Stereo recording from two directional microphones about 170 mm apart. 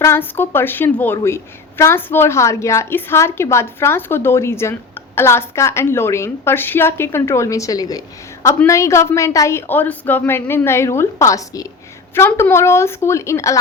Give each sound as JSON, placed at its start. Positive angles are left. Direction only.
{"t": 0.0, "sound": "a woman's voice", "side_deg": 15}